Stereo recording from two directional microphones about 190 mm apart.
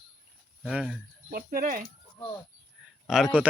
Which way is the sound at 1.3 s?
50° right (ahead or behind).